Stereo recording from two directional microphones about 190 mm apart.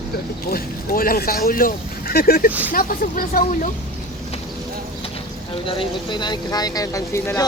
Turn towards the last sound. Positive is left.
turn(degrees=15)  # may be behind; listen again after turning